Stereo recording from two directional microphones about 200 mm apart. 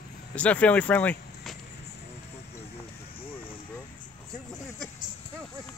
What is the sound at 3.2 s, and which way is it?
Vehicle, 25° left (ahead or behind).